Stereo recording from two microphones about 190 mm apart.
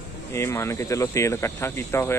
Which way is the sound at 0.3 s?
15° left (ahead or behind).